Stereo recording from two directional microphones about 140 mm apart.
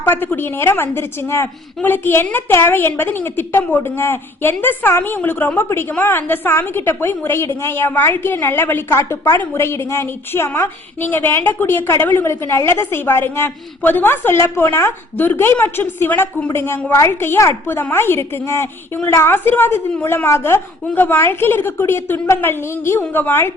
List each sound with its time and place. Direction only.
0.0 s a woman's voice: 15° left (ahead or behind)